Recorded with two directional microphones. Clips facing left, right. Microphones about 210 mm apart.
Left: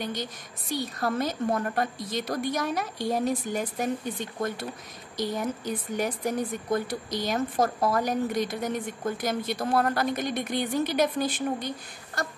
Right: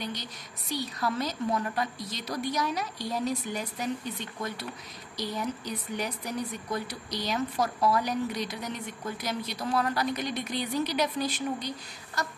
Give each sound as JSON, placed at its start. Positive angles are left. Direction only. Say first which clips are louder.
{"t": 0.0, "sound": "speech", "louder": "left 4 dB", "side_deg": 50}